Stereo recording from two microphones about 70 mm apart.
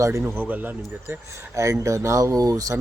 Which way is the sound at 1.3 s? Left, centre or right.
Right.